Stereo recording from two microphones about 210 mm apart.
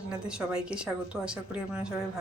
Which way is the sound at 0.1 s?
5° right (ahead or behind).